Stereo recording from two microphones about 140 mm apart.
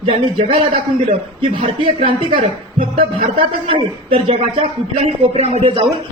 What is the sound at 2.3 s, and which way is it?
Speech, 90° right.